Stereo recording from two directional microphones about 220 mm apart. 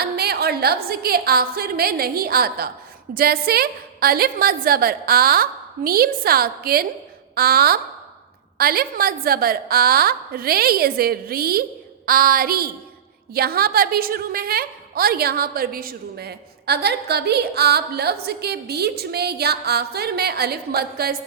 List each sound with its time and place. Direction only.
0.0 s a woman's voice: 45° right (ahead or behind)
12.0 s a sound: 40° right (ahead or behind)
13.3 s a woman's voice: 45° right (ahead or behind)